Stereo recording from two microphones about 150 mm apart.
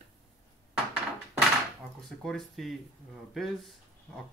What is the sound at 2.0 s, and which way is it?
Speech, centre (ahead or behind).